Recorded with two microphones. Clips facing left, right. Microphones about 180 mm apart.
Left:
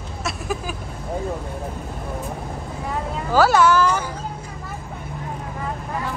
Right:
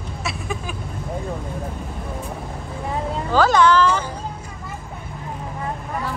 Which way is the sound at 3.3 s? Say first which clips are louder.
Even; 5° left (ahead or behind).